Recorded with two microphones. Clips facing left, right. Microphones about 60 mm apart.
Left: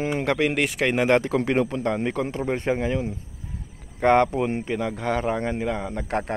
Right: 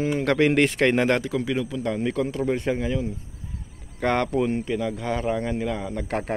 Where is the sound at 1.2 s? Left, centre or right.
Left.